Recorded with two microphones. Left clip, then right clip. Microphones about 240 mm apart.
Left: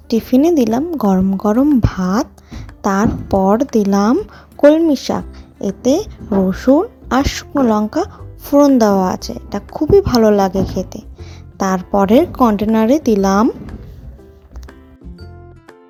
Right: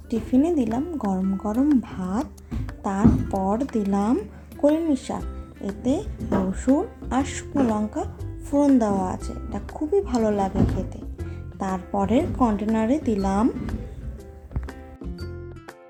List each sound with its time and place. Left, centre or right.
0.1 s speech: left